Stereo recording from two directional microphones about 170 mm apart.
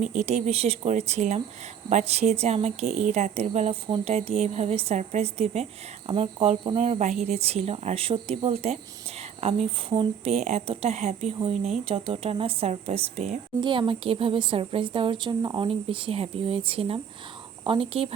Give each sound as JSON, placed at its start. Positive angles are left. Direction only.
{"t": 0.0, "sound": "a woman's voice", "side_deg": -40}
{"t": 13.6, "sound": "a woman's voice", "side_deg": -30}